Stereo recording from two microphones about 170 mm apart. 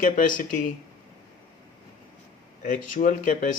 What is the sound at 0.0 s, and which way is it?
Speech, 50° left (ahead or behind).